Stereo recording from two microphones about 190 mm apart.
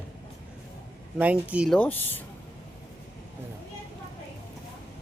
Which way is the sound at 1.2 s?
5° right (ahead or behind).